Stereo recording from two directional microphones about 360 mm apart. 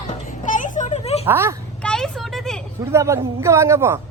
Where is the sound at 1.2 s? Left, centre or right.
Centre.